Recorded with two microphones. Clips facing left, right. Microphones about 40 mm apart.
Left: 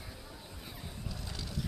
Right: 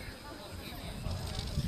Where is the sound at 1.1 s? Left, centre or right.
Right.